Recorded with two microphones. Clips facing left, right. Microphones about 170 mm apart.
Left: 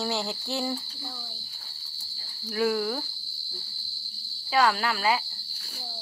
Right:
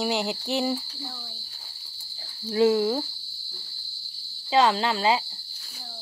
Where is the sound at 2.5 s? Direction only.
25° right (ahead or behind).